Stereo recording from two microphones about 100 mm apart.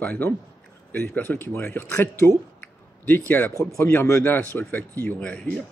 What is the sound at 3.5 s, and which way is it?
Speech, 25° left (ahead or behind).